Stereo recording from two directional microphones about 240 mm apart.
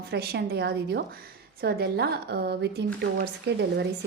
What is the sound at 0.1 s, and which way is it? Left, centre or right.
A woman's voice, right.